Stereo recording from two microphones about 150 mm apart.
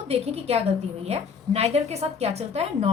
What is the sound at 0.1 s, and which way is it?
A woman's voice, 45° right (ahead or behind).